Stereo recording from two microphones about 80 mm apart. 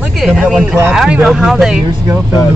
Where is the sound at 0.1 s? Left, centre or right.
Centre.